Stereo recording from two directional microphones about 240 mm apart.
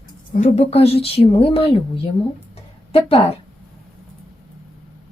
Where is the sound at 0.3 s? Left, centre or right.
Left.